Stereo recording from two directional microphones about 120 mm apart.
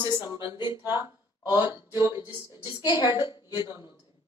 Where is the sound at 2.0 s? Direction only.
35° left (ahead or behind).